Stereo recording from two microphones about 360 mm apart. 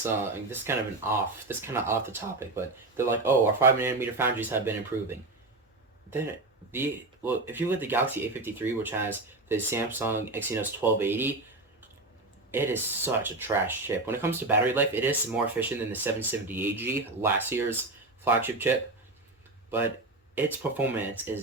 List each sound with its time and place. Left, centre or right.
0.0 s speech: centre
6.7 s speech: centre
12.5 s speech: centre
20.3 s speech: centre